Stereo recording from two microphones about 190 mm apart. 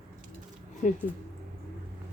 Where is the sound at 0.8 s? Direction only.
40° left (ahead or behind).